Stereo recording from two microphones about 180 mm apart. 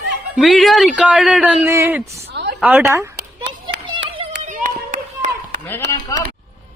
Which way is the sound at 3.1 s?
70° right (ahead or behind).